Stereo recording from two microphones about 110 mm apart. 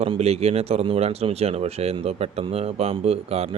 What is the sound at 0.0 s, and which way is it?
Speech, 70° right (ahead or behind).